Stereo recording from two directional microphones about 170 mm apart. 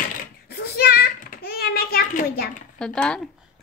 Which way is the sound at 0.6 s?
65° left (ahead or behind).